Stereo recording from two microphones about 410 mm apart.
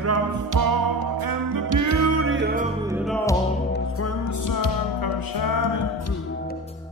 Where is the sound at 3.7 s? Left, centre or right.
Left.